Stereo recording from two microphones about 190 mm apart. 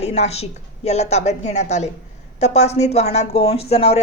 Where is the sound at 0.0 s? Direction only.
35° left (ahead or behind).